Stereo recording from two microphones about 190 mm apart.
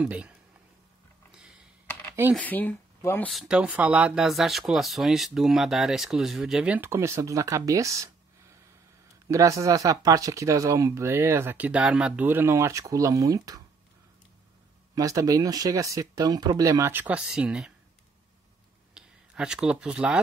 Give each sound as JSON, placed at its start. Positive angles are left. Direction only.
{"t": 0.0, "sound": "speech", "side_deg": -5}
{"t": 1.3, "sound": "a sound", "side_deg": -5}
{"t": 2.3, "sound": "speech", "side_deg": 10}
{"t": 3.3, "sound": "speech", "side_deg": 0}
{"t": 9.3, "sound": "speech", "side_deg": -15}
{"t": 15.0, "sound": "speech", "side_deg": -15}
{"t": 18.9, "sound": "speech", "side_deg": -5}